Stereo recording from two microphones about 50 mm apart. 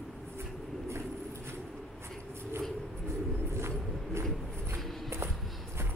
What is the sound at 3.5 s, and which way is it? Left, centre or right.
Bird, right.